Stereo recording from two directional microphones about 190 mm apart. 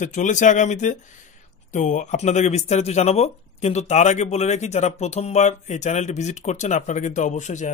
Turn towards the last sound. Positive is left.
turn(degrees=40)  # may be behind; listen again after turning